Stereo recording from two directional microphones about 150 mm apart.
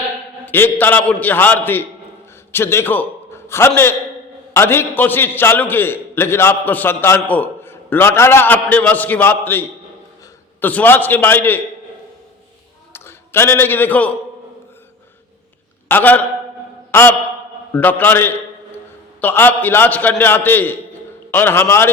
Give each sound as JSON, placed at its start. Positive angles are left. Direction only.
{"t": 0.4, "sound": "a man's voice", "side_deg": 15}
{"t": 12.9, "sound": "a man's voice", "side_deg": 15}
{"t": 15.9, "sound": "a man's voice", "side_deg": 15}